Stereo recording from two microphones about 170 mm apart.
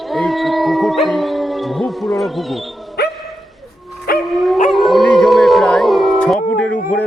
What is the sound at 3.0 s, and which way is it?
Dog, 70° left (ahead or behind).